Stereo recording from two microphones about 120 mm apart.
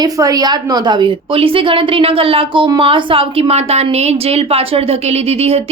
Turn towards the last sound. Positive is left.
turn(degrees=-55)  # may be behind; listen again after turning